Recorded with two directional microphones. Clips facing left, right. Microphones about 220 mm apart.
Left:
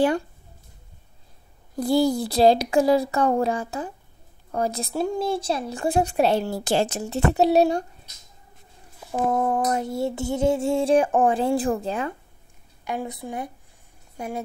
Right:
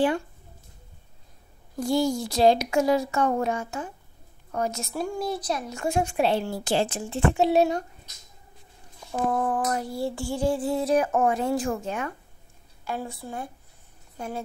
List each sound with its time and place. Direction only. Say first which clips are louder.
1.8 s speech: left 4 dB; 35° left (ahead or behind)
9.3 s speech: left 4 dB; 25° left (ahead or behind)
12.8 s speech: left 3 dB; 15° left (ahead or behind)